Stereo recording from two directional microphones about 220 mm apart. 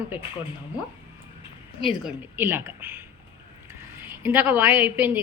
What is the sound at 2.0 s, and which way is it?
A woman's voice, 10° right (ahead or behind).